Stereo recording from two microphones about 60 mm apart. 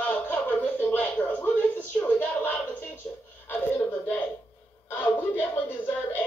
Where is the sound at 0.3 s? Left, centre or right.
Left.